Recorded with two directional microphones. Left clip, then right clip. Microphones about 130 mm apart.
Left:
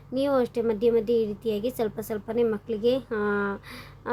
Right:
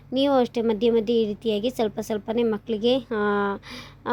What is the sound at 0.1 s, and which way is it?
A woman's voice, 25° right (ahead or behind).